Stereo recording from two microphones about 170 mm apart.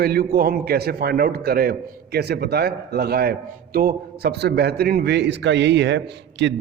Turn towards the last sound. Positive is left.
turn(degrees=-90)